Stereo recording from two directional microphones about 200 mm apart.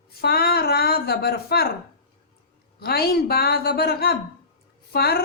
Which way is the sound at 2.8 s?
50° left (ahead or behind).